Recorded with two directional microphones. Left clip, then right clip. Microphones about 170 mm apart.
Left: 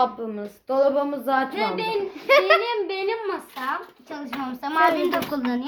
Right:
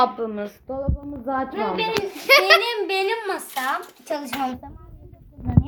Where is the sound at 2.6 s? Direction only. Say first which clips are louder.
Right 3 dB; 70° right (ahead or behind).